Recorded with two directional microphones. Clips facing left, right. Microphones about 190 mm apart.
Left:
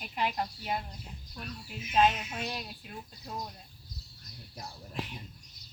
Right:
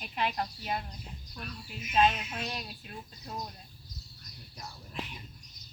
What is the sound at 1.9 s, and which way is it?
Speech, 10° left (ahead or behind).